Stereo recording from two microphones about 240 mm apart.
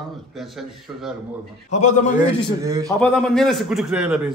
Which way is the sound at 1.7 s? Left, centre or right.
Left.